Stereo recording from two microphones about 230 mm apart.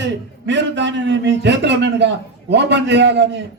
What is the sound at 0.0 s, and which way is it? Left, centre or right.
A man's voice, right.